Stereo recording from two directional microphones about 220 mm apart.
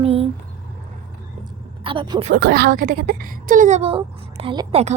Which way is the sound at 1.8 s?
20° right (ahead or behind).